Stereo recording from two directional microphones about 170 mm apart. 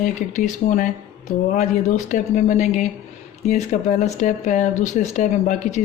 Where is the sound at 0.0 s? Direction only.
45° left (ahead or behind).